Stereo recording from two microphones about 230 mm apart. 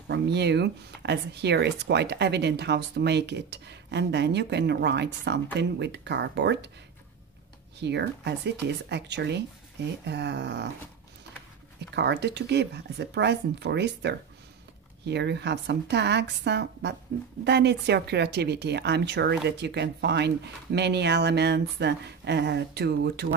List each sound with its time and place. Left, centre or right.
0.1 s speech: right
7.8 s speech: right
11.9 s speech: right